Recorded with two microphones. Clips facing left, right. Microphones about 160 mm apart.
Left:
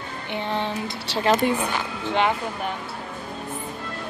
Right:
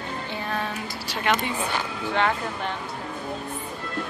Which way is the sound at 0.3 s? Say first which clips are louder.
Left 5 dB; 25° left (ahead or behind).